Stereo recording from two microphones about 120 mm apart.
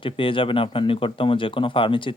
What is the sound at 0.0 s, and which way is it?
Speech, 45° left (ahead or behind).